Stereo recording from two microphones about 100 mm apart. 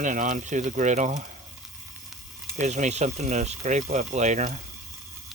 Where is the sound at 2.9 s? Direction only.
90° right.